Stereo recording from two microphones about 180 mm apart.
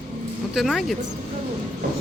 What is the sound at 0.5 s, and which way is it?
Speech, centre (ahead or behind).